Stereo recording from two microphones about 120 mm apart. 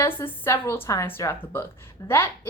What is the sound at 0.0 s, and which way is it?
A woman's voice, 20° left (ahead or behind).